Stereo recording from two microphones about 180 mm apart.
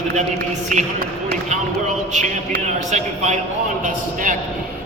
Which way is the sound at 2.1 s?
40° right (ahead or behind).